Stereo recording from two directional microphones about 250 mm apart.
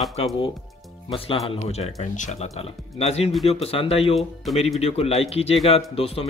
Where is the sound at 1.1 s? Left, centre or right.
Left.